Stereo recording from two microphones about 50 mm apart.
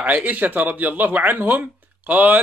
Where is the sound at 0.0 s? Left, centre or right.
Right.